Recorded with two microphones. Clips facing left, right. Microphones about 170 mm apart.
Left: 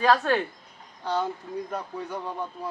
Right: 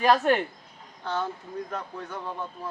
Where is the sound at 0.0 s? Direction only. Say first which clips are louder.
Right 1 dB; 20° right (ahead or behind).